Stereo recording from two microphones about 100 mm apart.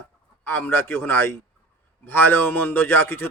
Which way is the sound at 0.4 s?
20° left (ahead or behind).